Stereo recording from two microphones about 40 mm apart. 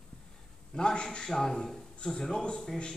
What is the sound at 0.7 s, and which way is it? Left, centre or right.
A man's voice, left.